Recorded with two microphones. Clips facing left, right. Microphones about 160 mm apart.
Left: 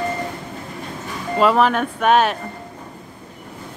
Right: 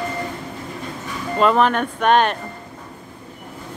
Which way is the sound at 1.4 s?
5° left (ahead or behind).